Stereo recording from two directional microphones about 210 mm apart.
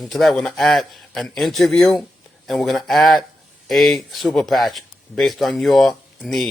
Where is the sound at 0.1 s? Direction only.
Centre (ahead or behind).